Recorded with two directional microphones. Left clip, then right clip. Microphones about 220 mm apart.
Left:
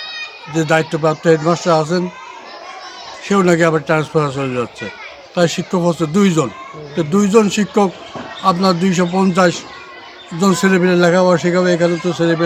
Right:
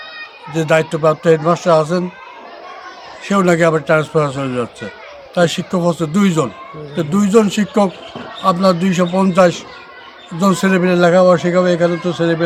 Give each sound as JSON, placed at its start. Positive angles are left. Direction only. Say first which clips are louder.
{"t": 0.5, "sound": "a man's voice", "louder": "right 1 dB", "side_deg": 0}
{"t": 3.2, "sound": "a man's voice", "louder": "even", "side_deg": 0}